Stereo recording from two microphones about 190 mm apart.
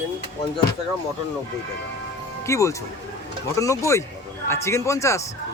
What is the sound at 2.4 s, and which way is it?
A man's voice, 15° left (ahead or behind).